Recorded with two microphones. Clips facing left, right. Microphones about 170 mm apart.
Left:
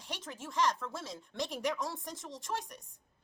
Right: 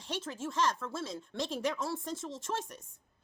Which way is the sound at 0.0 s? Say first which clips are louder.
Right 6 dB; 15° left (ahead or behind).